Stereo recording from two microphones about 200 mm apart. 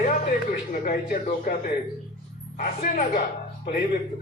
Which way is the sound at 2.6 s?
40° left (ahead or behind).